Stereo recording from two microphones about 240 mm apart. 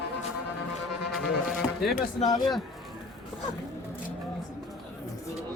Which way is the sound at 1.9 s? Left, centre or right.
Left.